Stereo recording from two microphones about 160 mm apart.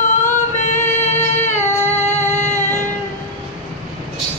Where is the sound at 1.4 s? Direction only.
15° left (ahead or behind).